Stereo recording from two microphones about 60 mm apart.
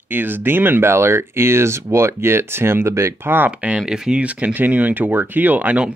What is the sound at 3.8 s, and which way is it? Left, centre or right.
Speech, centre.